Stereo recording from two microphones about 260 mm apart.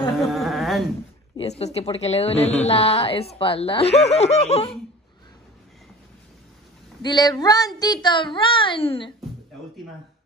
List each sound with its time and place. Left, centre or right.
0.2 s carnatic music: centre
1.3 s a woman's voice: left
7.0 s speech: centre